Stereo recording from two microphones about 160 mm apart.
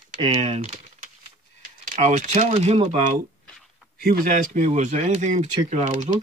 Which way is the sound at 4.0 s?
65° right (ahead or behind).